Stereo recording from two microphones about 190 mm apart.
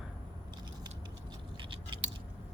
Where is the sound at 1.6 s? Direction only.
25° right (ahead or behind).